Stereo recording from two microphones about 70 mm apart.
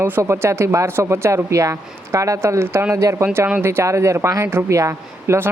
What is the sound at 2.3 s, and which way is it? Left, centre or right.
Speech, right.